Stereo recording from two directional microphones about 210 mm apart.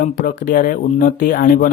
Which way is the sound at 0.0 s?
40° left (ahead or behind).